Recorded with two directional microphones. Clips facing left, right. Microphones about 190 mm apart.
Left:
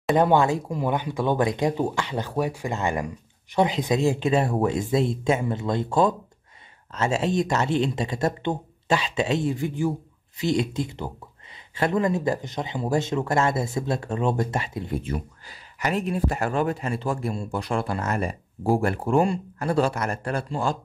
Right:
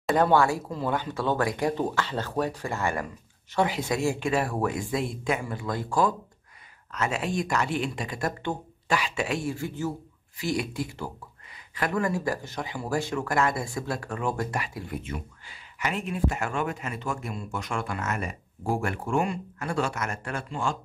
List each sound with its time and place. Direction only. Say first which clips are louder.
0.1 s speech: left 2 dB; 20° left (ahead or behind)
15.0 s speech: left 6 dB; 40° left (ahead or behind)